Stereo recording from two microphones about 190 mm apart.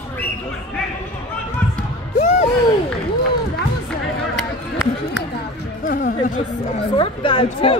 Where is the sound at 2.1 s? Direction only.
40° left (ahead or behind).